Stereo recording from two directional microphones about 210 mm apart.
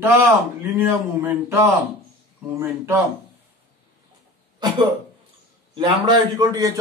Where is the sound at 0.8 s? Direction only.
10° right (ahead or behind).